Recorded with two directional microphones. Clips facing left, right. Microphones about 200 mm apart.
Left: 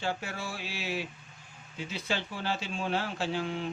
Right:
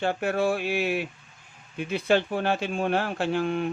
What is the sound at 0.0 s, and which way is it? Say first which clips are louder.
Speech: right 10 dB; 60° right (ahead or behind).